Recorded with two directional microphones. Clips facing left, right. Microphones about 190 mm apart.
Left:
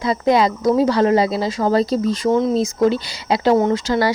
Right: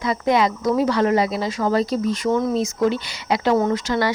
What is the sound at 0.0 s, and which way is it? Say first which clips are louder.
Speech: left 3 dB; 35° left (ahead or behind).